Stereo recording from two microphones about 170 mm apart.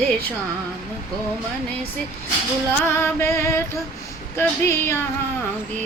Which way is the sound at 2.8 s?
15° left (ahead or behind).